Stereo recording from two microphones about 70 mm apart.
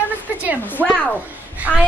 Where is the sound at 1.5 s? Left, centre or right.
Right.